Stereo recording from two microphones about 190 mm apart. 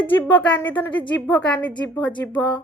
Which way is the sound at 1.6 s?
25° left (ahead or behind).